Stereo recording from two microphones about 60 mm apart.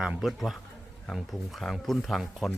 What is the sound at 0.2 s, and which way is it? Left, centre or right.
Speech, centre.